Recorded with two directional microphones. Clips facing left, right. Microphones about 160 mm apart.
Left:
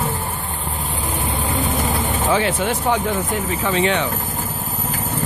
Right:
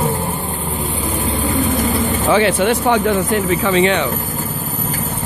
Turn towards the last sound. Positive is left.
turn(degrees=-85)